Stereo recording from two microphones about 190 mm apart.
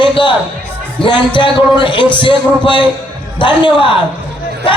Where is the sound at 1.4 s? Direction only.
25° left (ahead or behind).